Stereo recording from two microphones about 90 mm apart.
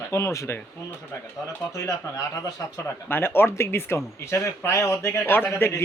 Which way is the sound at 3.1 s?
25° left (ahead or behind).